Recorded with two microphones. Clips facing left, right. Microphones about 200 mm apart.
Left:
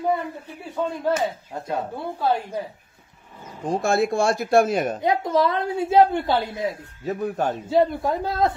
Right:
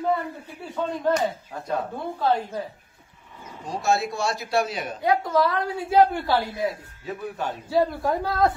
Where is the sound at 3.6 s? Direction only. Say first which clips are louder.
Left 4 dB; 50° left (ahead or behind).